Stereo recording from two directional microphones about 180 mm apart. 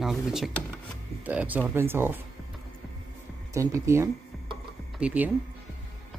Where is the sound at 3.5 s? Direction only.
15° right (ahead or behind).